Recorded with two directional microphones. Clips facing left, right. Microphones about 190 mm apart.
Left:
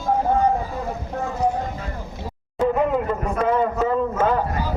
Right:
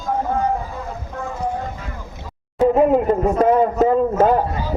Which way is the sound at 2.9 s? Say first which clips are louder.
Right 6 dB; 40° right (ahead or behind).